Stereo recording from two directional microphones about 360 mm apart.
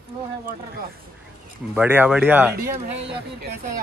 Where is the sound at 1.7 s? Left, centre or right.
Centre.